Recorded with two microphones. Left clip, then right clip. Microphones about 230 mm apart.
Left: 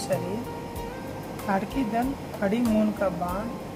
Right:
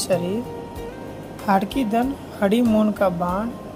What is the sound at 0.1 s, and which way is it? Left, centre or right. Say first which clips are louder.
Speech: right 7 dB; right.